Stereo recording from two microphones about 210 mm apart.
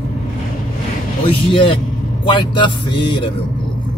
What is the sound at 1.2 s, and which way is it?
Speech, 25° left (ahead or behind).